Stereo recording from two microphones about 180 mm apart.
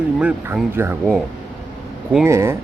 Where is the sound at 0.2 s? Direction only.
5° right (ahead or behind).